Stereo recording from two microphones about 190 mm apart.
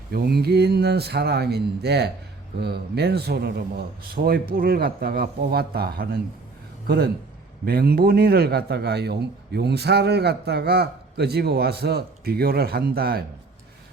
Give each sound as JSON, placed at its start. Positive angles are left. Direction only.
{"t": 0.1, "sound": "a man's voice", "side_deg": -55}